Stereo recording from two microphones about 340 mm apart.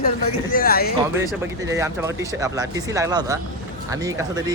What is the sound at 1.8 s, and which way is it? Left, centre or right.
Speech, centre.